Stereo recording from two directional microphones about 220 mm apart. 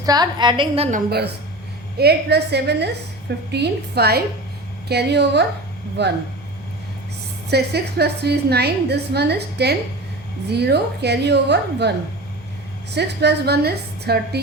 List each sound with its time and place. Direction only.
0.0 s a woman's voice: 20° right (ahead or behind)
0.9 s a woman's voice: 40° right (ahead or behind)
7.5 s a woman's voice: 45° right (ahead or behind)